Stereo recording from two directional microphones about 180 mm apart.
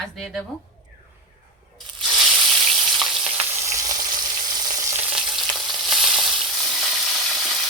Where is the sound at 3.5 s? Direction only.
15° right (ahead or behind).